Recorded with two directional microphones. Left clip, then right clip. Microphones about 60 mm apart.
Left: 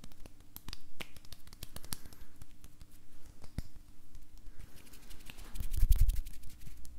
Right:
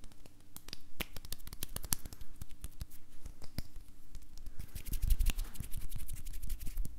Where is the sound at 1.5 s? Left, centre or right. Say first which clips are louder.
Right 5 dB; right.